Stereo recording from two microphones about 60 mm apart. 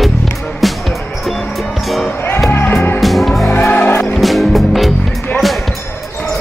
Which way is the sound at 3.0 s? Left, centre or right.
Centre.